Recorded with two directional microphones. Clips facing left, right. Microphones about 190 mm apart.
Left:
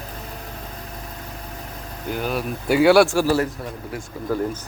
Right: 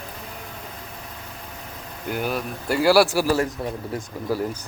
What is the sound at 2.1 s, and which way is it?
Speech, 10° right (ahead or behind).